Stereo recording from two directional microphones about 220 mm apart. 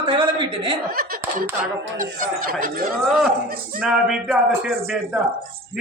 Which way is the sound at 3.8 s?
5° right (ahead or behind).